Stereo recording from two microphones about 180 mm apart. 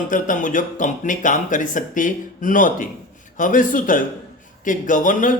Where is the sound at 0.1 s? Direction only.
45° left (ahead or behind).